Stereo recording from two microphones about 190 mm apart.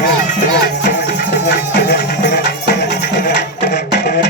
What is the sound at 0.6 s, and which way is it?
Music, 55° left (ahead or behind).